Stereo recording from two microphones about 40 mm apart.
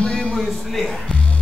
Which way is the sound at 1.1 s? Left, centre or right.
Left.